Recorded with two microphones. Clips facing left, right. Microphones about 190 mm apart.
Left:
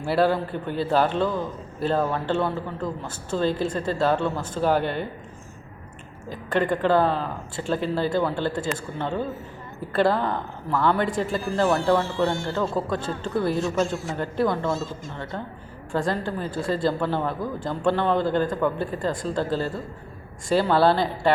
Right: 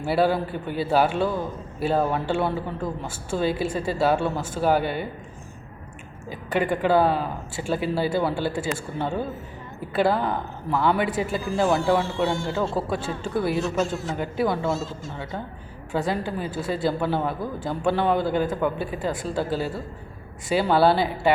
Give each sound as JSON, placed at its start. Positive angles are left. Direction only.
{"t": 0.0, "sound": "speech", "side_deg": -5}
{"t": 6.2, "sound": "speech", "side_deg": -5}
{"t": 15.9, "sound": "speech", "side_deg": -5}